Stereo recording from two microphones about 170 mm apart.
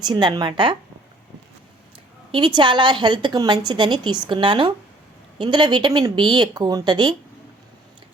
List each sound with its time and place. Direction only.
0.0 s a woman's voice: 25° right (ahead or behind)
2.3 s a woman's voice: 30° right (ahead or behind)